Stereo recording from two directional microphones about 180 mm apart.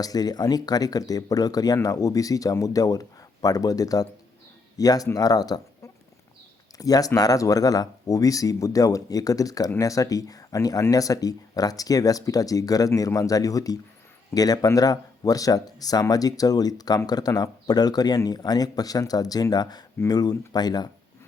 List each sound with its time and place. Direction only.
0.0 s speech: 20° left (ahead or behind)